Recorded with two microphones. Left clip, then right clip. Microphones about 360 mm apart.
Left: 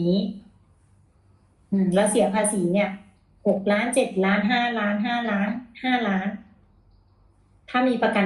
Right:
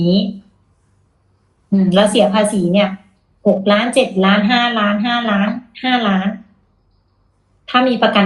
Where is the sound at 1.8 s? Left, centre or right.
Right.